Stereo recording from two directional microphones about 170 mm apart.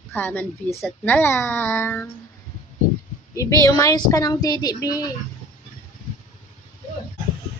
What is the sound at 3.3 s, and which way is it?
Speech, 20° left (ahead or behind).